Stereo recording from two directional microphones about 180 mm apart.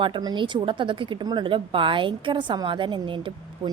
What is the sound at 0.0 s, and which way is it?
A woman's voice, 25° right (ahead or behind).